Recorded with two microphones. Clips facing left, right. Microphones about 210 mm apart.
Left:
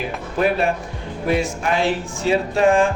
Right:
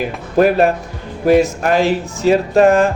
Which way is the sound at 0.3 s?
40° right (ahead or behind).